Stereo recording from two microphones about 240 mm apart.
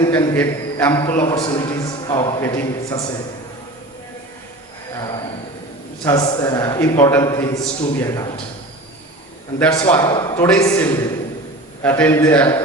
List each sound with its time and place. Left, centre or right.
0.0 s a man's voice: centre
4.9 s a man's voice: centre
9.7 s a man's voice: centre